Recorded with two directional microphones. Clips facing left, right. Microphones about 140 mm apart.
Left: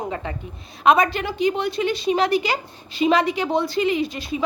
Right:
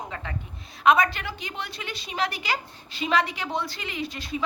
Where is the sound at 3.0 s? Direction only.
15° left (ahead or behind).